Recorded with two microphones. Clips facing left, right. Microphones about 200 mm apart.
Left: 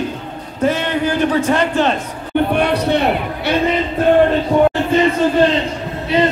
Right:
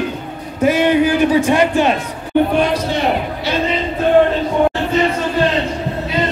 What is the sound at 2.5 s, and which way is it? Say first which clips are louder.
Speech: left 1 dB; 65° left (ahead or behind).